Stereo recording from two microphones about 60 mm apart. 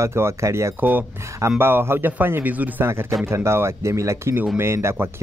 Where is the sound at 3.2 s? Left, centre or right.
Right.